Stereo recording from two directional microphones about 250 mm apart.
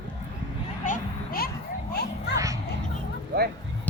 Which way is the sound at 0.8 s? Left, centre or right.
Left.